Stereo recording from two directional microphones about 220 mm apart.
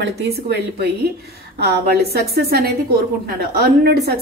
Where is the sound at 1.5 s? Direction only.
45° right (ahead or behind).